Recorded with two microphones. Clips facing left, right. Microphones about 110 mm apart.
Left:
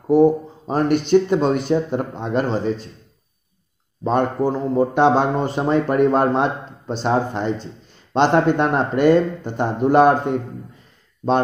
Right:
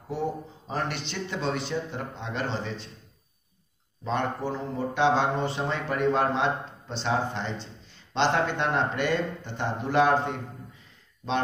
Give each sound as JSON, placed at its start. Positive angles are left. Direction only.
{"t": 0.1, "sound": "speech", "side_deg": 45}
{"t": 4.0, "sound": "speech", "side_deg": 45}